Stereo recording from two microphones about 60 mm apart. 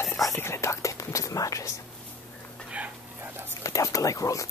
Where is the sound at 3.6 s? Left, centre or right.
Left.